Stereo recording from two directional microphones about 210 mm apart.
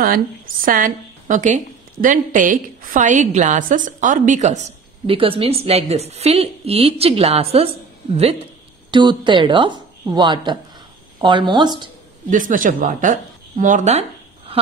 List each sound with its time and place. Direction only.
0.0 s a woman's voice: 40° right (ahead or behind); by 11.9 s 20° right (ahead or behind)
12.3 s a woman's voice: 40° right (ahead or behind)